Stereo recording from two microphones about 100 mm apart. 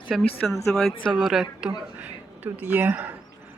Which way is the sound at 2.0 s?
15° right (ahead or behind).